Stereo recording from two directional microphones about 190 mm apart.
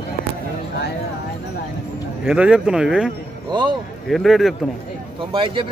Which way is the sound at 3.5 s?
25° right (ahead or behind).